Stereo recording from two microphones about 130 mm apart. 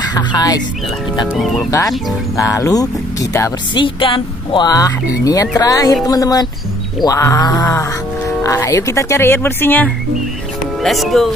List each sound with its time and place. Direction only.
0.0 s speech: 30° left (ahead or behind)
2.3 s speech: 25° left (ahead or behind)
3.7 s speech: 40° left (ahead or behind); by 9.8 s 15° left (ahead or behind)
10.8 s speech: centre (ahead or behind)